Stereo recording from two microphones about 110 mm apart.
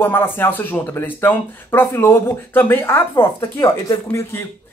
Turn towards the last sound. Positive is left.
turn(degrees=20)  # may be behind; listen again after turning